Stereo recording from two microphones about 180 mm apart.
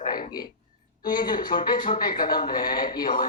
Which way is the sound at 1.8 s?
50° left (ahead or behind).